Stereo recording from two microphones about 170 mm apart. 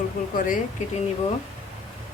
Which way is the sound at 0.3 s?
50° left (ahead or behind).